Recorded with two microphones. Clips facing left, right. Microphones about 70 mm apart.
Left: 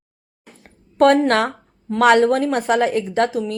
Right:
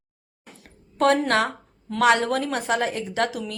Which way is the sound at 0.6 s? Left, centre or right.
Left.